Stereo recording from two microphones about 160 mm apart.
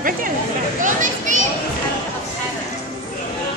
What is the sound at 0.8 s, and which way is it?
Children playing, 55° right (ahead or behind).